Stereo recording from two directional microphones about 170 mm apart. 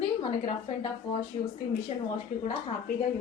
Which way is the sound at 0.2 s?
35° left (ahead or behind).